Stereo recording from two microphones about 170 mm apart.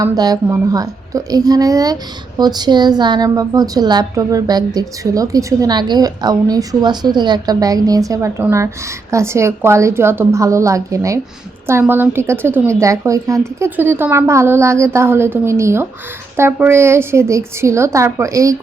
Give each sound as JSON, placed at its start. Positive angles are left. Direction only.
{"t": 0.0, "sound": "a woman's voice", "side_deg": -20}